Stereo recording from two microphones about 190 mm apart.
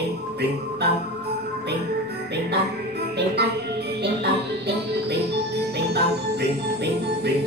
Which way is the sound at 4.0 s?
60° right (ahead or behind).